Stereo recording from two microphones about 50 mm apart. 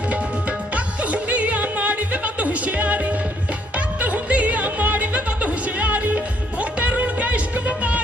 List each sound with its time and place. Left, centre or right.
1.1 s music: right